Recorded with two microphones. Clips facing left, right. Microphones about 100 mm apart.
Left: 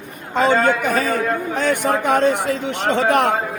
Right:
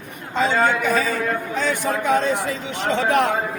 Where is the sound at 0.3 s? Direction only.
55° left (ahead or behind).